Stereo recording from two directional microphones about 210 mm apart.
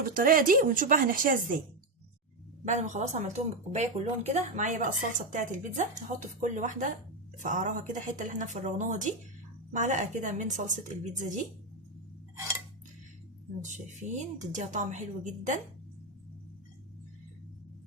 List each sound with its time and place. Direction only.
0.1 s speech: 40° right (ahead or behind)
2.6 s speech: 35° right (ahead or behind)
13.6 s speech: 35° right (ahead or behind)